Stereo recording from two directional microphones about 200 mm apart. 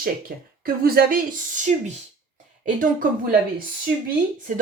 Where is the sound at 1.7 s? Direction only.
35° right (ahead or behind).